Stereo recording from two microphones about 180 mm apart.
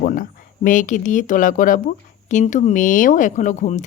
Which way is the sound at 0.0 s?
50° left (ahead or behind).